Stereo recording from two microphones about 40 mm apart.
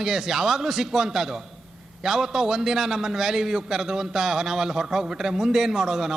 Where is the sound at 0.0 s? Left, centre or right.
Centre.